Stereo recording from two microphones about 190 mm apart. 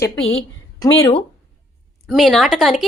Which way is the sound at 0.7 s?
20° left (ahead or behind).